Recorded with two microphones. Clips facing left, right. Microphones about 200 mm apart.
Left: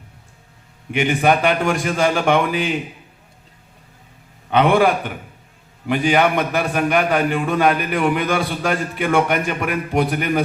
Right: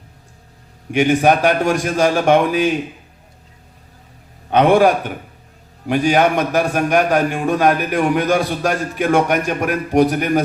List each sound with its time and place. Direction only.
0.9 s a man's voice: 45° right (ahead or behind)
4.5 s a man's voice: 45° right (ahead or behind)